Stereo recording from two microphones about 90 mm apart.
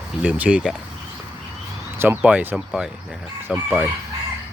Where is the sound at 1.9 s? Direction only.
25° right (ahead or behind).